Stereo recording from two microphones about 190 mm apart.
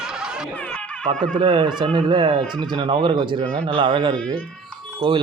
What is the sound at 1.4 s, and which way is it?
Speech, 25° right (ahead or behind).